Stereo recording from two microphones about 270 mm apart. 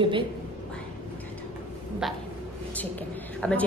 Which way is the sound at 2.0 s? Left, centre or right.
Centre.